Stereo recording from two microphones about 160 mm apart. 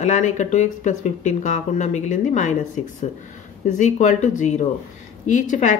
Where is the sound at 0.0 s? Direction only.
45° left (ahead or behind).